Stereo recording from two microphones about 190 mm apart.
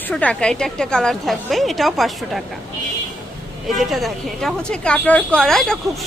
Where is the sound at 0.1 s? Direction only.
5° left (ahead or behind).